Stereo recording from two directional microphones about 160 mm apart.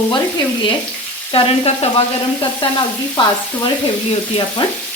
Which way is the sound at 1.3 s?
40° left (ahead or behind).